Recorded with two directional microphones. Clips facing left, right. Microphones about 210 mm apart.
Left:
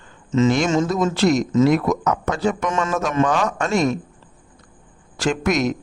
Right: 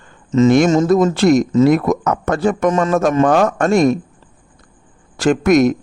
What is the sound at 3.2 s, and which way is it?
Speech, 55° right (ahead or behind).